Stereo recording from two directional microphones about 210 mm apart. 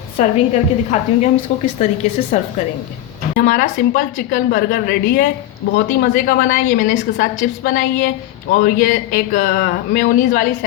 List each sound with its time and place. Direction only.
0.2 s a woman's voice: 35° left (ahead or behind)
3.3 s a woman's voice: 40° left (ahead or behind)